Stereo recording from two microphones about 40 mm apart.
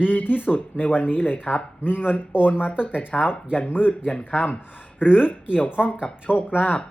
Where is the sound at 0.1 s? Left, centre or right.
Left.